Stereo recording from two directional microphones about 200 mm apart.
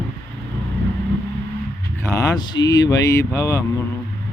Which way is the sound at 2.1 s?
20° left (ahead or behind).